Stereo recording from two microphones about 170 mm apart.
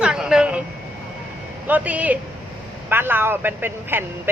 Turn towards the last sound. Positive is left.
turn(degrees=-10)  # may be behind; listen again after turning